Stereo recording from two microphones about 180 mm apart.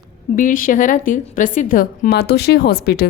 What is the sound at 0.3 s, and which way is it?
A woman's voice, 50° left (ahead or behind).